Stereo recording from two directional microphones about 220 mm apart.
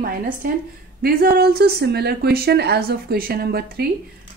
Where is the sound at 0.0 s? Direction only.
40° right (ahead or behind).